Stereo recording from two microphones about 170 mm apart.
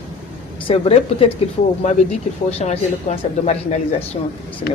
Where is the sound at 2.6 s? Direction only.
40° left (ahead or behind).